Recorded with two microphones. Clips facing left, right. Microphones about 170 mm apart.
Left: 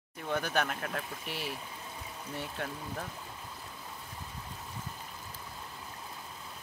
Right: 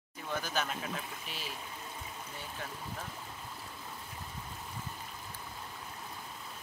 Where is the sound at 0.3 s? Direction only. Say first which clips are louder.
Left 4 dB; 60° left (ahead or behind).